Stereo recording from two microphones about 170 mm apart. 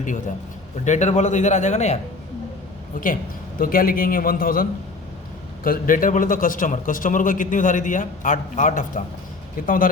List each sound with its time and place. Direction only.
0.9 s a man's voice: 45° left (ahead or behind)
3.6 s a man's voice: 55° left (ahead or behind)